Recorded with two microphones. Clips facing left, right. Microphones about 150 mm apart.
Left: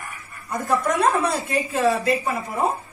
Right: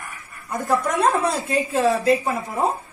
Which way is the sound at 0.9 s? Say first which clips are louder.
Right 1 dB; 25° right (ahead or behind).